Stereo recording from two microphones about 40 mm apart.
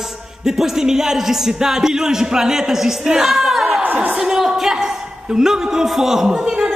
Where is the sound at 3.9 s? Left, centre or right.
Centre.